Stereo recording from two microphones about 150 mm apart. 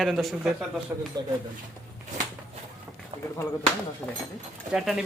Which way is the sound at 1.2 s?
30° right (ahead or behind).